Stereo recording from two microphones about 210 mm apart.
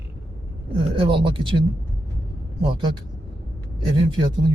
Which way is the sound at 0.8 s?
25° right (ahead or behind).